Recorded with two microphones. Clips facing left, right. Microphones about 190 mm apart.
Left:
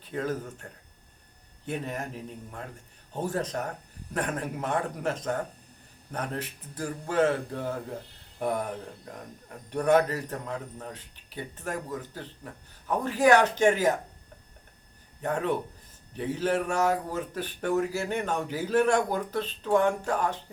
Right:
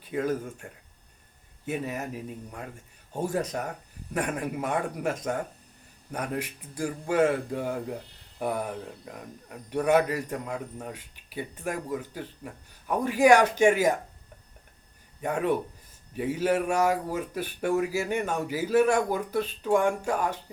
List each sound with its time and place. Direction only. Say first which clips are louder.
0.0 s speech: right 3 dB; 10° right (ahead or behind)
15.2 s speech: right 2 dB; 10° right (ahead or behind)